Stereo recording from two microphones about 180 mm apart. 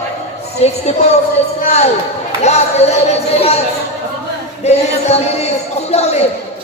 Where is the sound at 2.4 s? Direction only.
35° left (ahead or behind).